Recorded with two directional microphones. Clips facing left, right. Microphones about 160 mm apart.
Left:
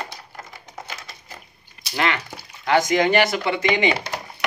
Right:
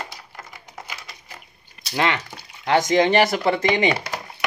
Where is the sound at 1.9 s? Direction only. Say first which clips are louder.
Right 1 dB; 25° right (ahead or behind).